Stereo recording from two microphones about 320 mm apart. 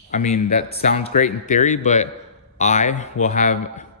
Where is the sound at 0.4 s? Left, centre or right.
Left.